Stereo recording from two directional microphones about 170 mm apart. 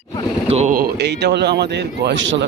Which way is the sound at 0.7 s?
75° right (ahead or behind).